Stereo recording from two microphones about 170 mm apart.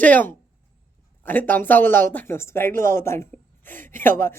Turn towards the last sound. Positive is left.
turn(degrees=15)  # may be behind; listen again after turning